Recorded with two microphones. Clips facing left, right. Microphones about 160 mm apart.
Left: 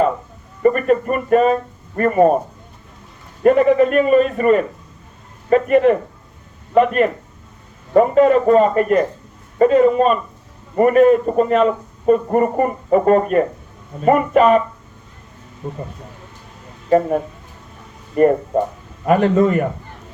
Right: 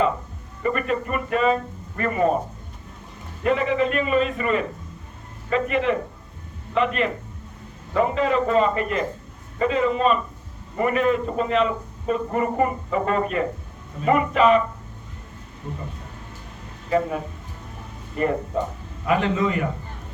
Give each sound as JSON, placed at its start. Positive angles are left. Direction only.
{"t": 0.6, "sound": "a man's voice", "side_deg": 45}
{"t": 3.4, "sound": "a man's voice", "side_deg": 50}
{"t": 18.2, "sound": "a man's voice", "side_deg": 50}